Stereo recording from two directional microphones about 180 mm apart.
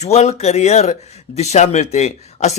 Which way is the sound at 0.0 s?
40° left (ahead or behind).